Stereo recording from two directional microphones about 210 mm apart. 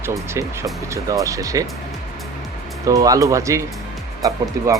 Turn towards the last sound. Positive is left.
turn(degrees=-15)  # may be behind; listen again after turning